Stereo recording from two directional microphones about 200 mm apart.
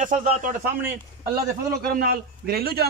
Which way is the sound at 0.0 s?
40° right (ahead or behind).